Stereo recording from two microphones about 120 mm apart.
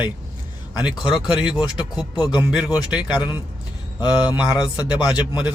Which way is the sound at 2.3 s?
35° left (ahead or behind).